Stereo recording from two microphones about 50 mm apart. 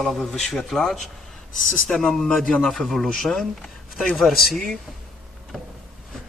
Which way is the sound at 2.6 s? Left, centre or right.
Centre.